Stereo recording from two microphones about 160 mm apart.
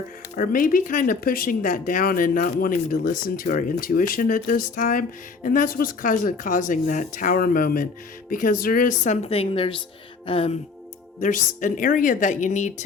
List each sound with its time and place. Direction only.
0.3 s speech: 60° left (ahead or behind); by 9.7 s 35° left (ahead or behind)
10.2 s music: 35° left (ahead or behind)
11.2 s speech: 55° left (ahead or behind)